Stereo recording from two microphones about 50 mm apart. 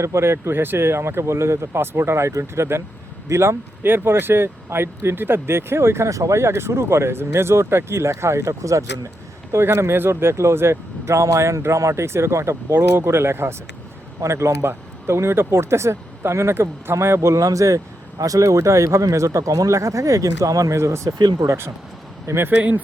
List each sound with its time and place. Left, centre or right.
0.0 s speech: right
3.2 s speech: right
3.8 s speech: right
9.5 s speech: right
12.7 s speech: right
14.2 s speech: right
16.9 s speech: right